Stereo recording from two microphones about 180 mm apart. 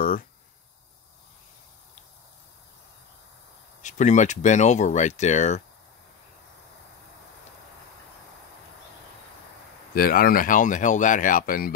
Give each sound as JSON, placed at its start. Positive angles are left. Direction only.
{"t": 0.0, "sound": "a sound", "side_deg": 50}
{"t": 3.8, "sound": "speech", "side_deg": 40}
{"t": 9.9, "sound": "speech", "side_deg": 55}